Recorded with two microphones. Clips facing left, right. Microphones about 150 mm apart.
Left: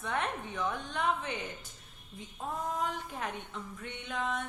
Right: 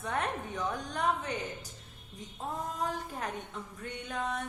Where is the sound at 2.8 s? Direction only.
40° right (ahead or behind).